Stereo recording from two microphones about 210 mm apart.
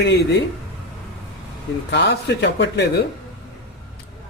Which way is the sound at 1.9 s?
55° left (ahead or behind).